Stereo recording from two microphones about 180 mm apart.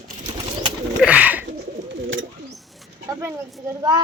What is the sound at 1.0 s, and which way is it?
Bird, 5° right (ahead or behind).